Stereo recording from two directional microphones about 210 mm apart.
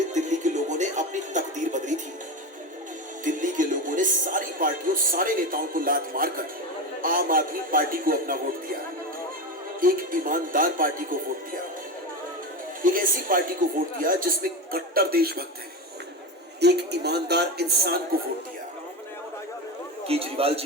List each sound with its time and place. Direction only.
0.1 s music: 35° right (ahead or behind)
3.2 s speech: 40° right (ahead or behind)
7.0 s music: 40° right (ahead or behind)
9.8 s speech: 40° right (ahead or behind)
12.8 s speech: 40° right (ahead or behind)
16.6 s music: 50° right (ahead or behind)
20.1 s a man's voice: 25° right (ahead or behind)